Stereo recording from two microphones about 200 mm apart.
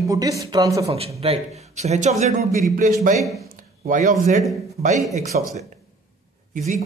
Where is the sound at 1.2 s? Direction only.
30° right (ahead or behind).